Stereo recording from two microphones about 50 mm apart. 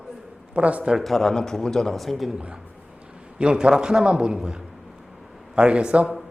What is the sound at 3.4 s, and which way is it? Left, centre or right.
A man's voice, centre.